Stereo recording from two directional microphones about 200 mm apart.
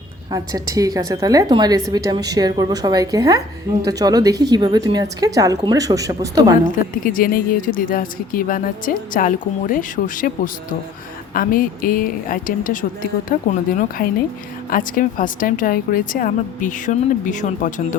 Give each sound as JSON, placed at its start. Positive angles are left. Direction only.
{"t": 0.3, "sound": "a woman's voice", "side_deg": -20}
{"t": 7.0, "sound": "speech", "side_deg": 45}